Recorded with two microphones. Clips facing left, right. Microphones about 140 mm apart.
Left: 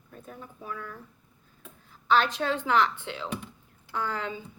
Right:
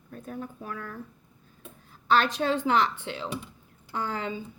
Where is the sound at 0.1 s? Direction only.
50° right (ahead or behind).